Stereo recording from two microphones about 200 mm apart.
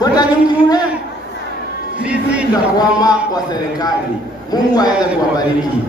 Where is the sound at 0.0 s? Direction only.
20° left (ahead or behind).